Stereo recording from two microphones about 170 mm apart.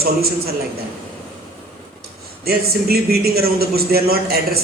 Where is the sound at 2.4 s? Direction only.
65° right (ahead or behind).